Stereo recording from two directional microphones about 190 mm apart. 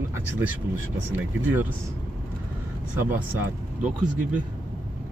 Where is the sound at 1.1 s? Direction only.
10° right (ahead or behind).